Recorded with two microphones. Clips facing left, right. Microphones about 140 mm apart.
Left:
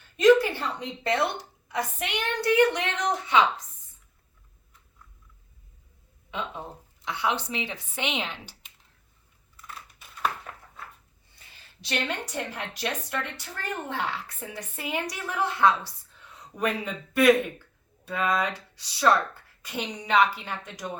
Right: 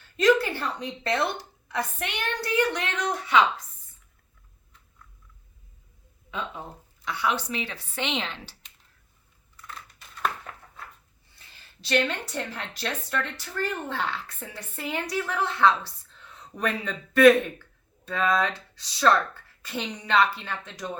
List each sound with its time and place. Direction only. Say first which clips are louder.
0.2 s a sound: left 3 dB; 20° left (ahead or behind)
1.0 s a woman's voice: left 1 dB; 20° left (ahead or behind)
7.0 s a woman's voice: right 1 dB; 20° left (ahead or behind)
9.6 s crushing: right 1 dB; 10° left (ahead or behind)
11.3 s a woman's voice: even; 15° left (ahead or behind)